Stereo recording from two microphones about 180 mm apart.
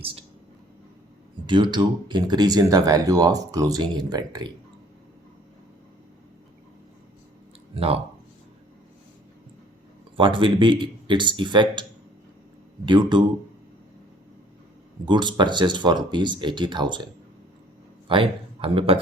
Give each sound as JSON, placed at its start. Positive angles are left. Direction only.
{"t": 0.0, "sound": "speech", "side_deg": -30}
{"t": 1.5, "sound": "speech", "side_deg": -25}
{"t": 7.8, "sound": "speech", "side_deg": -30}
{"t": 10.2, "sound": "speech", "side_deg": -30}
{"t": 15.0, "sound": "speech", "side_deg": -25}
{"t": 18.1, "sound": "a man's voice", "side_deg": -30}